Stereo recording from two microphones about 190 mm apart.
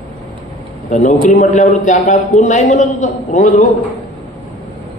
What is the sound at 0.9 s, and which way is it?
A man's voice, 40° left (ahead or behind).